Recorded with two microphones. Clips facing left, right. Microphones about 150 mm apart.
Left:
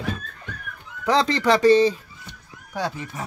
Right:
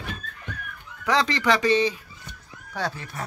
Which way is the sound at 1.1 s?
30° left (ahead or behind).